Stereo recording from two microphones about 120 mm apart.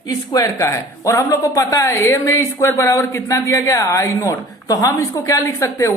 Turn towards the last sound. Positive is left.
turn(degrees=25)  # may be behind; listen again after turning